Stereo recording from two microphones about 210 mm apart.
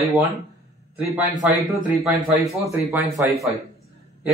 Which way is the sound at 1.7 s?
Centre (ahead or behind).